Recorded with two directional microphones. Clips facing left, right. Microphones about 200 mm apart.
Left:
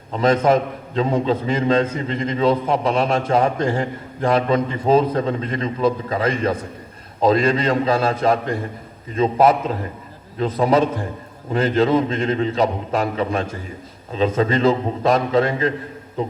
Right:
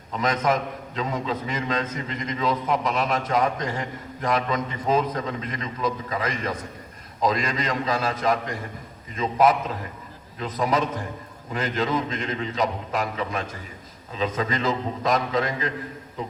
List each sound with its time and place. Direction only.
0.1 s a man's voice: 30° left (ahead or behind)